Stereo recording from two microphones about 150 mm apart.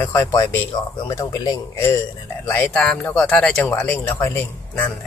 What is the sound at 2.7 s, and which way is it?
Speech, 5° left (ahead or behind).